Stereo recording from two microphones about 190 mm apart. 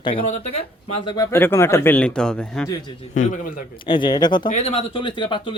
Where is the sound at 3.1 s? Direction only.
45° left (ahead or behind).